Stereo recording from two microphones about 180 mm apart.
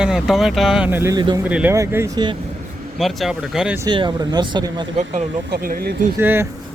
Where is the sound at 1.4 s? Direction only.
10° right (ahead or behind).